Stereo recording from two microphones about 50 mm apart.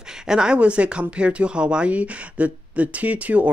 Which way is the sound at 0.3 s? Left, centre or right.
Centre.